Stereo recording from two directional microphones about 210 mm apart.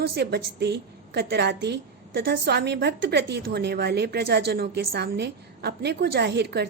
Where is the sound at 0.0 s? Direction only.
50° right (ahead or behind).